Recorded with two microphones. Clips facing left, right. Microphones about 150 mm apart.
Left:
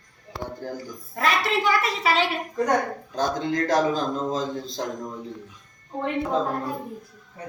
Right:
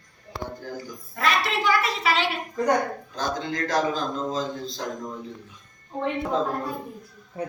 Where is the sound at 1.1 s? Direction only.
40° left (ahead or behind).